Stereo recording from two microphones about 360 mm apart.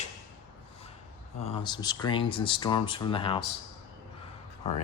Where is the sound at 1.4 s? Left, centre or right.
Centre.